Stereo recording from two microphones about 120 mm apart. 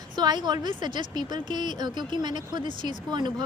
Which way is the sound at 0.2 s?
35° right (ahead or behind).